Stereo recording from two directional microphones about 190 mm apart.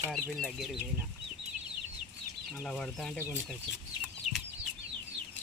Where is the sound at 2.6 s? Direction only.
5° left (ahead or behind).